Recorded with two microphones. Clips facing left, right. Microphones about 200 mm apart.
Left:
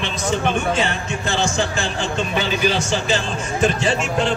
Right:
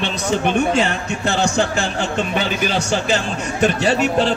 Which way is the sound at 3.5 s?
65° right (ahead or behind).